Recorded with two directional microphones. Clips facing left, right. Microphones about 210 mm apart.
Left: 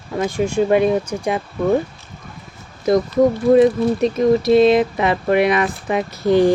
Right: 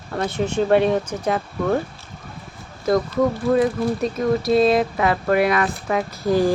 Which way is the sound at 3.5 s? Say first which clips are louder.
Left 6 dB; 25° left (ahead or behind).